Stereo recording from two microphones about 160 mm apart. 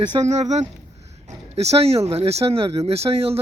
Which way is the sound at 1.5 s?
40° right (ahead or behind).